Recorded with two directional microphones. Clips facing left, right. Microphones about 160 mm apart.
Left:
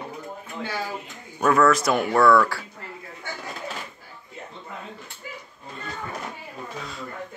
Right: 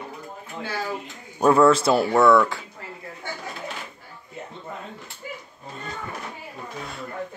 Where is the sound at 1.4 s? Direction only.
30° right (ahead or behind).